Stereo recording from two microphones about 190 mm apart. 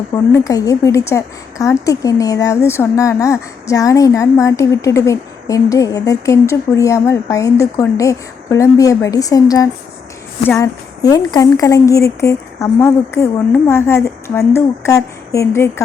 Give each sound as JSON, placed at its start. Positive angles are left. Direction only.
{"t": 0.3, "sound": "a woman's voice", "side_deg": 20}